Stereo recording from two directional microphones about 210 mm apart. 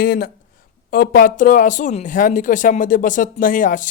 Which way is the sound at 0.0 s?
45° left (ahead or behind).